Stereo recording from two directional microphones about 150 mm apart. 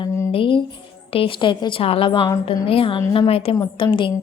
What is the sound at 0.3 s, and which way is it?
Music, 35° left (ahead or behind).